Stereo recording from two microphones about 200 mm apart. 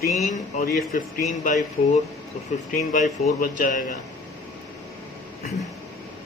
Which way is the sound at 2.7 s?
45° left (ahead or behind).